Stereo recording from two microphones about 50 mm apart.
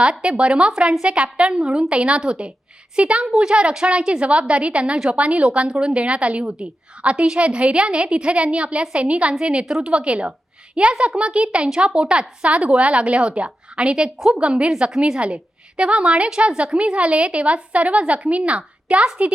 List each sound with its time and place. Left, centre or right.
0.0 s a woman's voice: right